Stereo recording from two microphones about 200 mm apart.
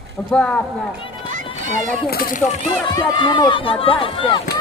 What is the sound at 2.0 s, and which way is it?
Speech, 45° left (ahead or behind).